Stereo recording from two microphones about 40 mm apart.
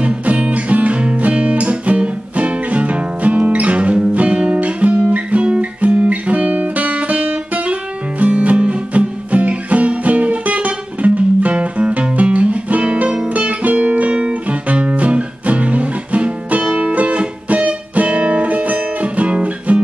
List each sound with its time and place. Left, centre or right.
0.0 s music: right